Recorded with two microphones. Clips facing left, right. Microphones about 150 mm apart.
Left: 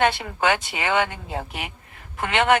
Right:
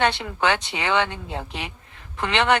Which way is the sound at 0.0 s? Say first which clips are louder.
Left 1 dB; 50° left (ahead or behind).